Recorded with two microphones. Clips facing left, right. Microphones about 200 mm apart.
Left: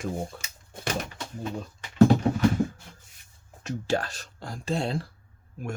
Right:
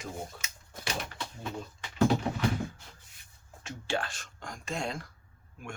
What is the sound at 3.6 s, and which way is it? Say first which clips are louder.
Speech: left 6 dB; 40° left (ahead or behind).